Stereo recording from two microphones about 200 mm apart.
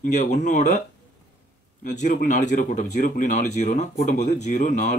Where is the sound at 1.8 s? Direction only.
40° left (ahead or behind).